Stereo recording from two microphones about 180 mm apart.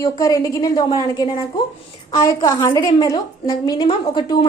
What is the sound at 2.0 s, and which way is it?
A woman's voice, 20° left (ahead or behind).